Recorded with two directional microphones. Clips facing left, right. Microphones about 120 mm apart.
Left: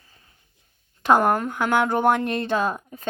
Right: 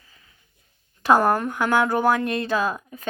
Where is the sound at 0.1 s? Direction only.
40° left (ahead or behind).